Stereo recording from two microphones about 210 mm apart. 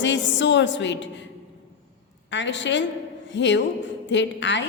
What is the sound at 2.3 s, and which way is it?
A woman's voice, 60° left (ahead or behind).